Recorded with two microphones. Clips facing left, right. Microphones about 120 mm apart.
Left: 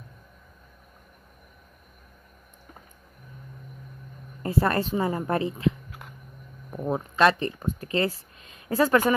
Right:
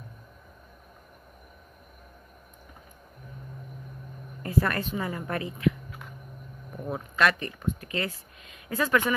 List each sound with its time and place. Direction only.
4.4 s speech: 30° left (ahead or behind)
6.8 s speech: 30° left (ahead or behind)